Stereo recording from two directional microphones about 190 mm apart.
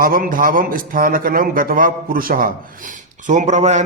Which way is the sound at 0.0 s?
50° right (ahead or behind).